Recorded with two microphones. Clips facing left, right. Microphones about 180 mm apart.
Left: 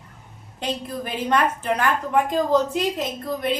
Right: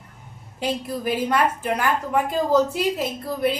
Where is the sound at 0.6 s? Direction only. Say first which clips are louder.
Right 2 dB; 10° right (ahead or behind).